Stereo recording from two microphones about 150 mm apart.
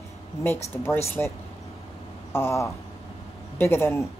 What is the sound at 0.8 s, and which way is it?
Speech, 15° left (ahead or behind).